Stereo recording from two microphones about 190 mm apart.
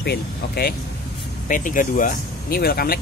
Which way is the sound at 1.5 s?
45° left (ahead or behind).